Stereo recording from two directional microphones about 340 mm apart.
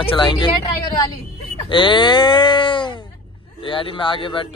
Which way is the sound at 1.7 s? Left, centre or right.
Centre.